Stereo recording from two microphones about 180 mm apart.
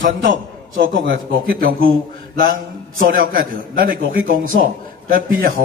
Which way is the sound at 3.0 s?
50° right (ahead or behind).